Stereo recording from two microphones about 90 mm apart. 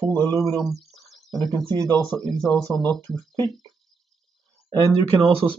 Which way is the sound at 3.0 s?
25° left (ahead or behind).